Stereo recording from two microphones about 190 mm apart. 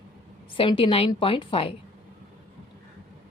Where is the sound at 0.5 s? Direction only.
30° left (ahead or behind).